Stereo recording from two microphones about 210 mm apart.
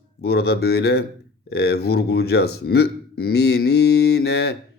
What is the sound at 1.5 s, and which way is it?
Speech, 50° left (ahead or behind).